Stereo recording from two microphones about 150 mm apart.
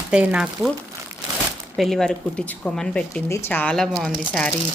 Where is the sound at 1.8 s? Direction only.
Centre (ahead or behind).